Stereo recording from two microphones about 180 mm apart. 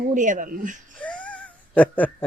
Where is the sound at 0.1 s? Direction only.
45° right (ahead or behind).